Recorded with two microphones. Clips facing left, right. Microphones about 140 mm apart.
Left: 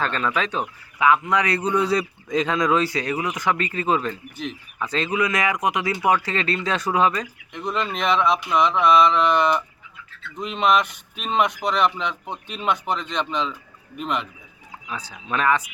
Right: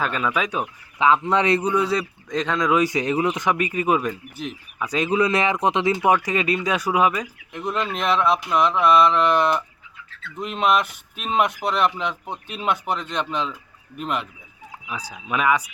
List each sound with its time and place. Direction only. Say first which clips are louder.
0.0 s speech: even; 10° right (ahead or behind)
0.9 s speech: right 1 dB; 25° right (ahead or behind)
1.6 s speech: even; 5° right (ahead or behind)
2.7 s speech: right 2 dB; 15° right (ahead or behind)
5.1 s speech: right 3 dB; 30° right (ahead or behind); by 15.6 s 10° right (ahead or behind)